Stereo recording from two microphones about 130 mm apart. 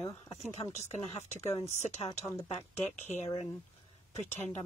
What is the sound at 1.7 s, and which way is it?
Speech, 60° left (ahead or behind).